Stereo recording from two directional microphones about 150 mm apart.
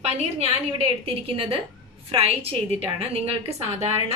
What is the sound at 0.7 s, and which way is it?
A woman's voice, 40° right (ahead or behind).